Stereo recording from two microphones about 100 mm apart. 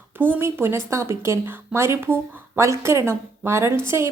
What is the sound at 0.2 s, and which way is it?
A woman's voice, 20° right (ahead or behind).